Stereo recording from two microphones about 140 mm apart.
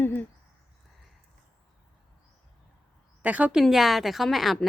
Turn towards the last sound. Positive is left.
turn(degrees=0)  # may be behind; listen again after turning